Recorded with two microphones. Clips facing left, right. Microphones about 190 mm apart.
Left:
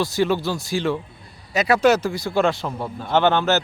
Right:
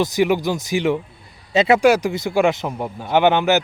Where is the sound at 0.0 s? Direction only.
15° right (ahead or behind).